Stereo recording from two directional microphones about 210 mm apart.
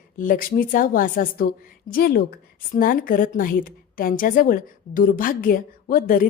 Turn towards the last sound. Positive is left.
turn(degrees=40)  # may be behind; listen again after turning